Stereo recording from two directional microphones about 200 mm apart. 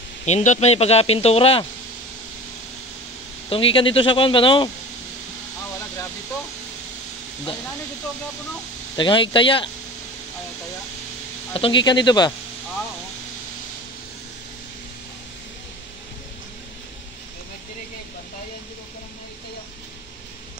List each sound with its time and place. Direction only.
0.2 s speech: 35° left (ahead or behind)
3.4 s speech: 25° left (ahead or behind)
8.9 s speech: 25° left (ahead or behind)
11.5 s speech: 25° left (ahead or behind)